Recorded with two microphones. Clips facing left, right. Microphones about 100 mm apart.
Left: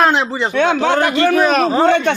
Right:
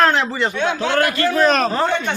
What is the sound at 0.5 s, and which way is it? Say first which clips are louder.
Speech: left 9 dB; 65° left (ahead or behind).